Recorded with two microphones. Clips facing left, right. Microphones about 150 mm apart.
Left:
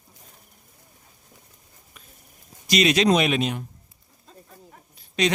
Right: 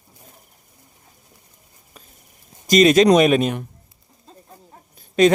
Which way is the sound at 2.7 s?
45° right (ahead or behind).